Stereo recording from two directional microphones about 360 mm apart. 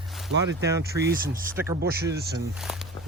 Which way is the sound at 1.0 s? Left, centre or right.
Right.